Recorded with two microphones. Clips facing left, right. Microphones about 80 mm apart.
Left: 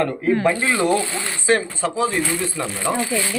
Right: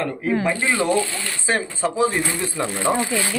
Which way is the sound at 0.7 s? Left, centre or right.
Left.